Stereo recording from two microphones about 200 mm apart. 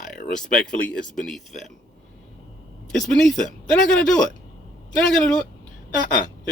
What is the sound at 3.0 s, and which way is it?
Speech, 5° left (ahead or behind).